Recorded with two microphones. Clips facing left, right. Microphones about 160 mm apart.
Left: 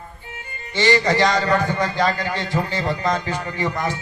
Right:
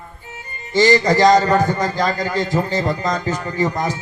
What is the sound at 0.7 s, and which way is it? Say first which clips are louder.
A man's voice: right 4 dB; 40° right (ahead or behind).